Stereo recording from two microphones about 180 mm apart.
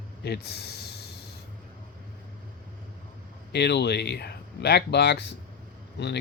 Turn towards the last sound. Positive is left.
turn(degrees=70)  # may be behind; listen again after turning